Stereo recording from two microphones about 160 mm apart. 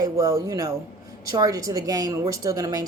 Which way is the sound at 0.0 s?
20° right (ahead or behind).